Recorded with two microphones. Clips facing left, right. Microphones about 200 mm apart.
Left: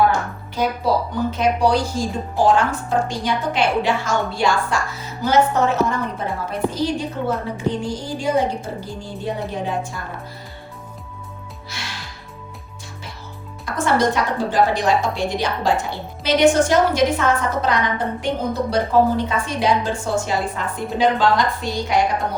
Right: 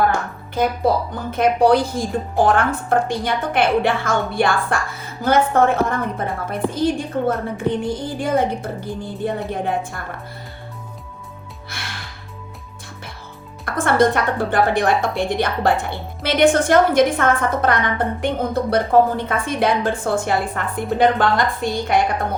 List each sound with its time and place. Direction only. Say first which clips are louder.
0.6 s a woman's voice: right 2 dB; 50° right (ahead or behind)
11.7 s music: even; 55° right (ahead or behind)
13.7 s a woman's voice: right 2 dB; 55° right (ahead or behind)